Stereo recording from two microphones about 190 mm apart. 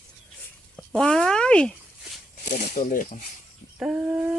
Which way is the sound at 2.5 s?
40° left (ahead or behind).